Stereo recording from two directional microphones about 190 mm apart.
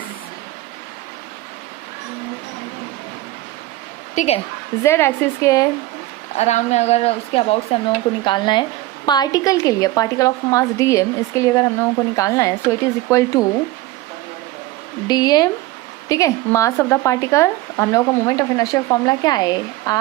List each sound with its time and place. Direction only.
4.1 s a woman's voice: 40° left (ahead or behind)
4.8 s speech: 15° left (ahead or behind)
6.3 s speech: 35° left (ahead or behind); by 13.4 s 15° left (ahead or behind)
15.0 s speech: 20° left (ahead or behind)